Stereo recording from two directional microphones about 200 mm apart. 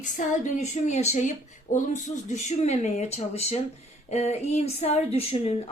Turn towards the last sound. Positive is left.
turn(degrees=30)  # may be behind; listen again after turning